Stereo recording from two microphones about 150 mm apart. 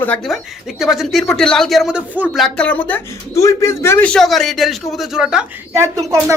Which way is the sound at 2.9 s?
20° left (ahead or behind).